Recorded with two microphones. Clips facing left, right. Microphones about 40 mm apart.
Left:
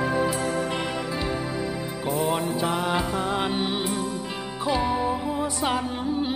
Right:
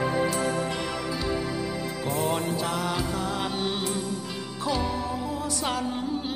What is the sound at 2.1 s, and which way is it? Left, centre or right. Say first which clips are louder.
Music: left 3 dB; centre.